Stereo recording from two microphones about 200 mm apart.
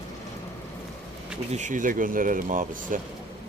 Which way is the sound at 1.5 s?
40° right (ahead or behind).